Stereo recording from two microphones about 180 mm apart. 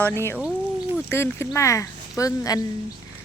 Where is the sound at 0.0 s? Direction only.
10° left (ahead or behind).